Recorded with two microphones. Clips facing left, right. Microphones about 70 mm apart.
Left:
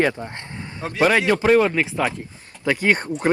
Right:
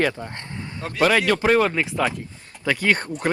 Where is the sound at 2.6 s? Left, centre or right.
Centre.